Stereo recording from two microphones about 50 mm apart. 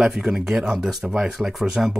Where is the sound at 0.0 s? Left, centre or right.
Centre.